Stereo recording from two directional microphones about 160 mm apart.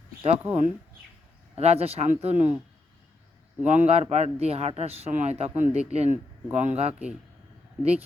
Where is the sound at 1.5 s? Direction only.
40° right (ahead or behind).